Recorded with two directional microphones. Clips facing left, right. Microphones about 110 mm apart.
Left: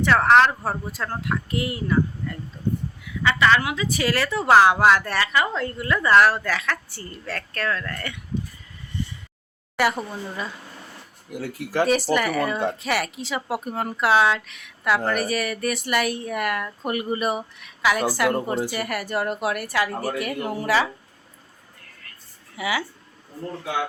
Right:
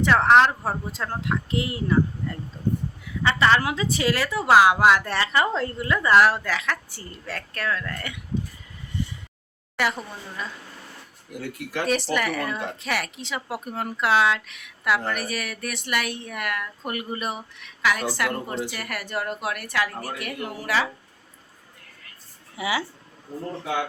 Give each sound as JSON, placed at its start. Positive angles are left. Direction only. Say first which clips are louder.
{"t": 0.0, "sound": "a woman's voice", "louder": "left 1 dB", "side_deg": -15}
{"t": 5.8, "sound": "a woman's voice", "louder": "left 1 dB", "side_deg": -20}
{"t": 9.7, "sound": "speech", "louder": "left 4 dB", "side_deg": 5}
{"t": 11.3, "sound": "speech", "louder": "left 6 dB", "side_deg": 35}
{"t": 11.9, "sound": "a woman's voice", "louder": "even", "side_deg": 5}
{"t": 22.5, "sound": "a woman's voice", "louder": "left 1 dB", "side_deg": -25}